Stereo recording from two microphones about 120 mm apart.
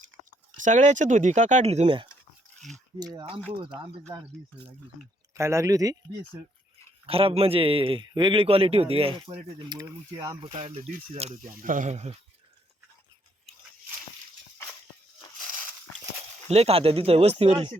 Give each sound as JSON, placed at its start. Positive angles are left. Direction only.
{"t": 0.3, "sound": "speech", "side_deg": -90}
{"t": 2.6, "sound": "biting", "side_deg": 5}
{"t": 3.0, "sound": "speech", "side_deg": -35}
{"t": 5.3, "sound": "speech", "side_deg": -25}
{"t": 7.1, "sound": "speech", "side_deg": -50}
{"t": 10.4, "sound": "speech", "side_deg": -55}
{"t": 11.7, "sound": "speech", "side_deg": -80}
{"t": 16.5, "sound": "speech", "side_deg": -60}